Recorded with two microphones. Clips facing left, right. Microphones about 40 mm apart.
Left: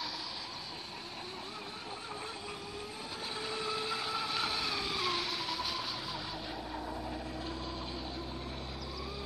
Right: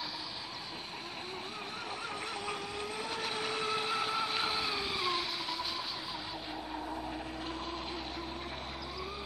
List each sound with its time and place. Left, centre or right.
3.3 s vehicle: right
4.2 s vehicle: right; by 5.9 s centre